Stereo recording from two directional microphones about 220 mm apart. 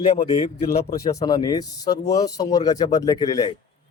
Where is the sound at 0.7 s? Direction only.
45° left (ahead or behind).